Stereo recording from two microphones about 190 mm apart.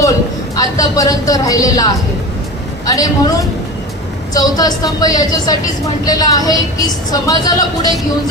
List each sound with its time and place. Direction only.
0.5 s a woman's voice: 20° left (ahead or behind)
4.4 s a woman's voice: 20° left (ahead or behind)